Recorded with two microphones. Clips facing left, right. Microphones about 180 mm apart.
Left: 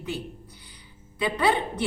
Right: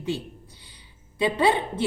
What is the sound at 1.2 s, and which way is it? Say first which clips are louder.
Speech: right 2 dB; 25° right (ahead or behind).